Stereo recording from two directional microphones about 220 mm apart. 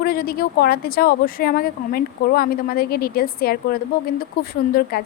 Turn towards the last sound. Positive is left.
turn(degrees=45)  # may be behind; listen again after turning